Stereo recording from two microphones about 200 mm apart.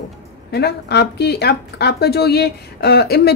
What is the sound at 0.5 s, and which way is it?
A woman's voice, 55° left (ahead or behind).